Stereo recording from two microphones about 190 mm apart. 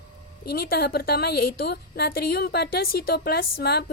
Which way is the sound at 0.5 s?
55° left (ahead or behind).